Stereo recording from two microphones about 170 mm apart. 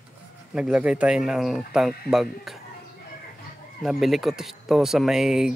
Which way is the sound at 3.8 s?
Centre (ahead or behind).